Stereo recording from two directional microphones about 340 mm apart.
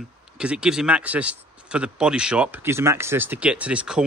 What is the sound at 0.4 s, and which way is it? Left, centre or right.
Speech, centre.